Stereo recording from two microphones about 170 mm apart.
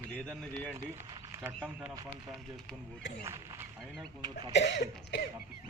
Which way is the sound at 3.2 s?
15° right (ahead or behind).